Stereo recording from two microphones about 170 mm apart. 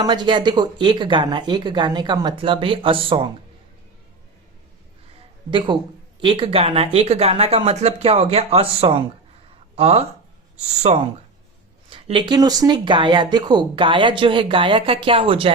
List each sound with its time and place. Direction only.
0.0 s speech: 25° right (ahead or behind)
5.5 s speech: 30° right (ahead or behind)